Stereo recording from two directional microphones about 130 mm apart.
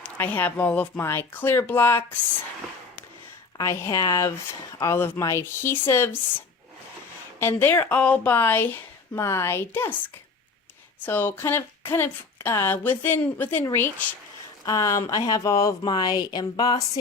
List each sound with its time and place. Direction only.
0.0 s speech: 15° left (ahead or behind)
3.6 s speech: 25° left (ahead or behind)
7.3 s speech: 15° left (ahead or behind)
11.0 s speech: 15° left (ahead or behind); by 16.8 s 30° left (ahead or behind)